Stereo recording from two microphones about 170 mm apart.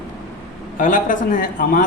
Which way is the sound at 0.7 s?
50° left (ahead or behind).